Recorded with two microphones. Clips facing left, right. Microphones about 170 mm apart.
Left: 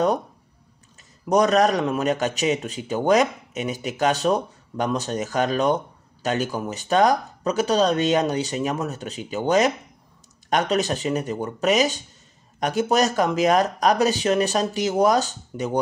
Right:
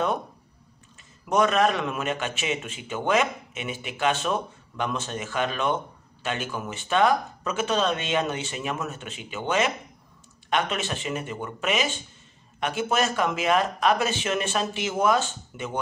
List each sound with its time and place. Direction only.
1.2 s a man's voice: 40° left (ahead or behind)